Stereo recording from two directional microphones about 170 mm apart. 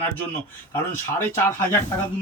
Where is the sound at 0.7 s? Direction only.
15° left (ahead or behind).